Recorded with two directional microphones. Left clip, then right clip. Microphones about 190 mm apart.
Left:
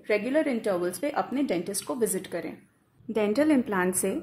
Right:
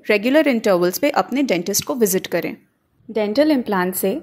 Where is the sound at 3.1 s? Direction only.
15° right (ahead or behind).